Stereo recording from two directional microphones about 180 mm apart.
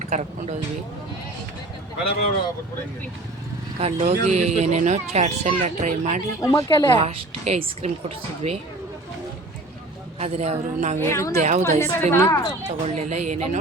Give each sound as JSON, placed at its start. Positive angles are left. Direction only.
{"t": 0.0, "sound": "speech", "side_deg": -40}
{"t": 3.8, "sound": "speech", "side_deg": -35}
{"t": 6.4, "sound": "speech", "side_deg": 20}
{"t": 6.9, "sound": "speech", "side_deg": -35}
{"t": 10.2, "sound": "speech", "side_deg": -35}
{"t": 11.0, "sound": "a woman's voice", "side_deg": 15}
{"t": 11.3, "sound": "a woman's voice", "side_deg": -45}
{"t": 11.8, "sound": "a woman's voice", "side_deg": 15}
{"t": 12.6, "sound": "speech", "side_deg": -40}